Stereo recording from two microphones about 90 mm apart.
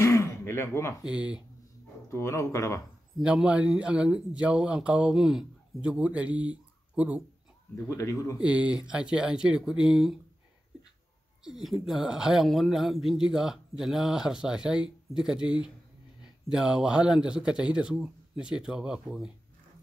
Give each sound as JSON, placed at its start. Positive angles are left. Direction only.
{"t": 0.0, "sound": "a sound", "side_deg": 30}
{"t": 1.0, "sound": "speech", "side_deg": -10}
{"t": 2.0, "sound": "speech", "side_deg": 30}
{"t": 3.2, "sound": "speech", "side_deg": -10}
{"t": 7.7, "sound": "speech", "side_deg": 35}
{"t": 8.4, "sound": "speech", "side_deg": -10}
{"t": 11.4, "sound": "speech", "side_deg": -5}